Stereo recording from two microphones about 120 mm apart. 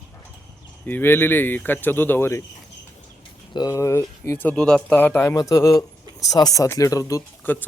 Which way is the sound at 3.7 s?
25° left (ahead or behind).